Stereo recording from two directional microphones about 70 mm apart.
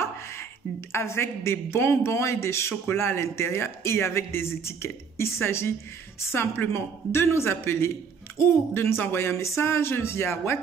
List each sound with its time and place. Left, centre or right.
0.0 s speech: left
6.7 s speech: left